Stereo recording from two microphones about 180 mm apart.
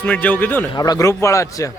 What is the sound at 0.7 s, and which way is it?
A man's voice, 20° left (ahead or behind).